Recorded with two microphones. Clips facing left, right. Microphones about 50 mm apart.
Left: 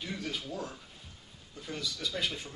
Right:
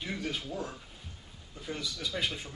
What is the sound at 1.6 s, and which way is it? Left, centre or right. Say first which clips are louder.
Speech: even; centre.